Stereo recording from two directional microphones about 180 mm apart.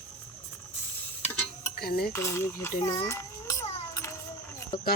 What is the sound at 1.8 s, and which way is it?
Cutlery, 60° left (ahead or behind).